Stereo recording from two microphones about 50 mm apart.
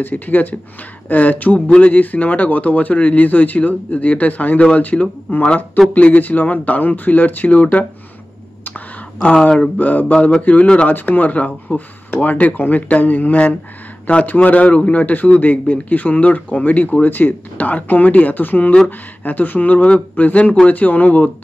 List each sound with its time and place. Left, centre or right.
0.0 s a man's voice: left
9.4 s a man's voice: left